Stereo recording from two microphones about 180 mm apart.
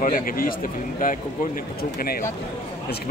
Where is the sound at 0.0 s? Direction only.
50° left (ahead or behind).